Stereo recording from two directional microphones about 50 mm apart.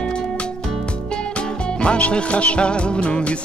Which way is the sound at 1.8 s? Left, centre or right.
Left.